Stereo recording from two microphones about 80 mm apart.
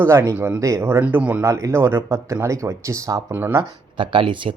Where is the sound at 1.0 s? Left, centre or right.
Centre.